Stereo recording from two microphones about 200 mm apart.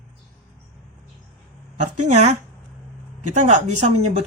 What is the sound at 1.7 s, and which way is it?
A woman's voice, 35° right (ahead or behind).